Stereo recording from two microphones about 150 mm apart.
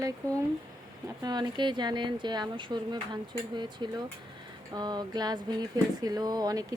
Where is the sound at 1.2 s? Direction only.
30° right (ahead or behind).